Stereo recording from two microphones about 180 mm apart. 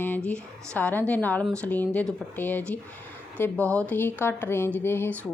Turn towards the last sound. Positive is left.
turn(degrees=10)  # may be behind; listen again after turning